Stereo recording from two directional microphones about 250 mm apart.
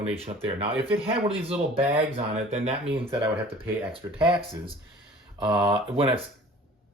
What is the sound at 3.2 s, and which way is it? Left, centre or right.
Speech, centre.